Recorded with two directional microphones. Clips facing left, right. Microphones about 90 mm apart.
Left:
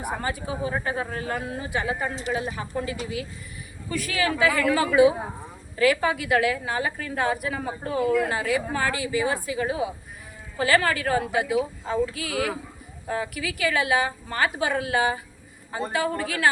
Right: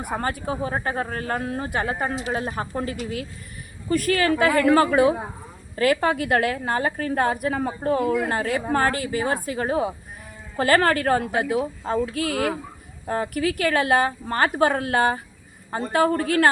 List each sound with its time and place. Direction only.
0.2 s a woman's voice: 50° right (ahead or behind)